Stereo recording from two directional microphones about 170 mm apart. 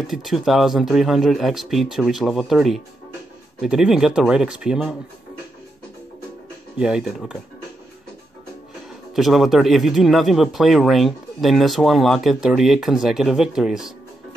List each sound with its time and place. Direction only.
0.0 s speech: centre (ahead or behind)
6.8 s speech: 5° right (ahead or behind)
9.1 s speech: centre (ahead or behind)